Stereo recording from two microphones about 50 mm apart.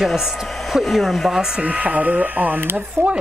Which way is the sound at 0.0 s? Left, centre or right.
Centre.